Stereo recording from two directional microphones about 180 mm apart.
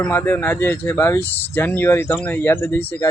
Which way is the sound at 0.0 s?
10° left (ahead or behind).